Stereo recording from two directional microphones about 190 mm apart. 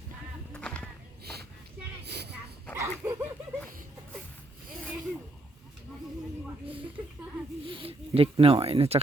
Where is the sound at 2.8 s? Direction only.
15° right (ahead or behind).